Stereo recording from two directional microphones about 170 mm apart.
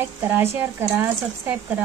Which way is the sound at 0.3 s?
15° right (ahead or behind).